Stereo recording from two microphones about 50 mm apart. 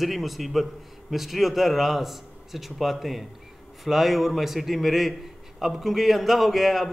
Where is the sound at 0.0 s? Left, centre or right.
Centre.